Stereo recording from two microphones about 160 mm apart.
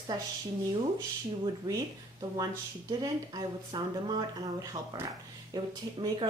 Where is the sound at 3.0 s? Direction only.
25° right (ahead or behind).